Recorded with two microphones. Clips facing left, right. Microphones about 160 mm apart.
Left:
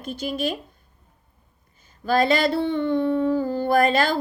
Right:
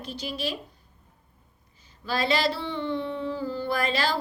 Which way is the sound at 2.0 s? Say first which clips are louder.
Left 6 dB; 50° left (ahead or behind).